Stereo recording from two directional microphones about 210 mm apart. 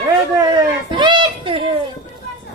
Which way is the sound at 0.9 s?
20° right (ahead or behind).